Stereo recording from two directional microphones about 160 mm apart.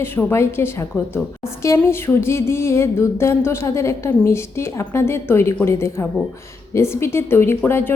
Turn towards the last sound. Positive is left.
turn(degrees=15)  # may be behind; listen again after turning